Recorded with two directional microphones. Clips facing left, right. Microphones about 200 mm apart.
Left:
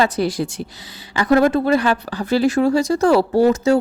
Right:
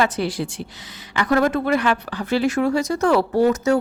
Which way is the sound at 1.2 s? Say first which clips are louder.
Left 4 dB; 30° left (ahead or behind).